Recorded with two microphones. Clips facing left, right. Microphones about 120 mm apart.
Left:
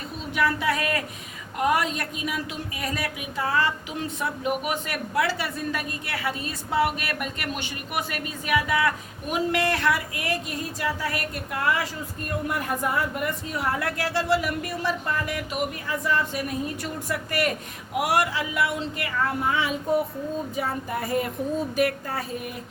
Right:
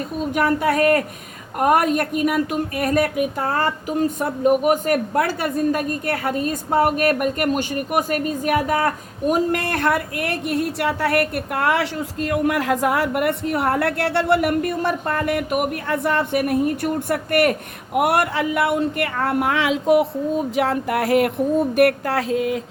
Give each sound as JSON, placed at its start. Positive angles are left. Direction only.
{"t": 0.2, "sound": "a woman's voice", "side_deg": -50}